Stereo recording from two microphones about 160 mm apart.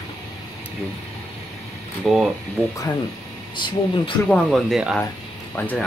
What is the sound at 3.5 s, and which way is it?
Speech, 30° left (ahead or behind).